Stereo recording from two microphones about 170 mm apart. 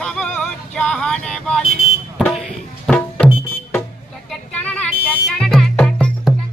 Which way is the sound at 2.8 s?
10° left (ahead or behind).